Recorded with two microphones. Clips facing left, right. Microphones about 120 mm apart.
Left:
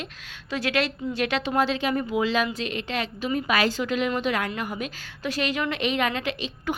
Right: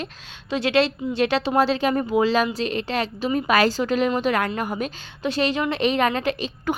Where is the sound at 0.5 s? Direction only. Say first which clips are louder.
Right 6 dB; 25° right (ahead or behind); by 4.9 s 40° right (ahead or behind).